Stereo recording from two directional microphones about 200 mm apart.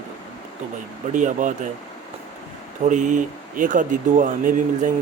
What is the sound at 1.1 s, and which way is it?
Speech, 40° right (ahead or behind).